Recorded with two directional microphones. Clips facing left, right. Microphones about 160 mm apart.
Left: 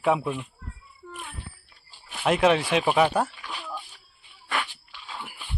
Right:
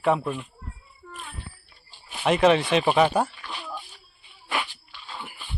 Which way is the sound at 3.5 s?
5° right (ahead or behind).